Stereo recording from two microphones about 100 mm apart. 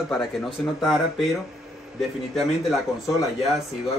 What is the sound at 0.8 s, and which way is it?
Speech, centre (ahead or behind).